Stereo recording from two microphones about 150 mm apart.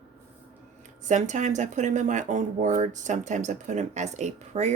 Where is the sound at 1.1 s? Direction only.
55° right (ahead or behind).